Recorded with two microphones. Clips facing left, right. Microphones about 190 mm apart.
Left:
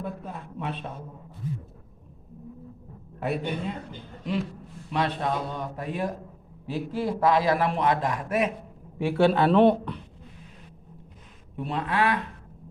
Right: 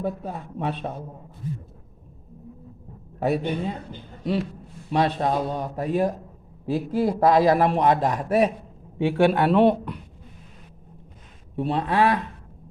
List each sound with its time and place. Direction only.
0.0 s a man's voice: 40° right (ahead or behind)
3.2 s a man's voice: 40° right (ahead or behind)
4.9 s a man's voice: 35° right (ahead or behind)
9.0 s speech: 15° right (ahead or behind)
11.5 s a man's voice: 35° right (ahead or behind)